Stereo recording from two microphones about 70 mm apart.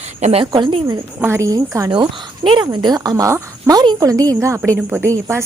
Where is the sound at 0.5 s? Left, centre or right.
Right.